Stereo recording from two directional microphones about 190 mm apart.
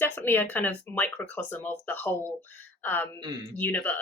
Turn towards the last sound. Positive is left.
turn(degrees=10)  # may be behind; listen again after turning